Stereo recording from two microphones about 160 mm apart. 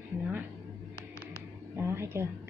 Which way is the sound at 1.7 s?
15° right (ahead or behind).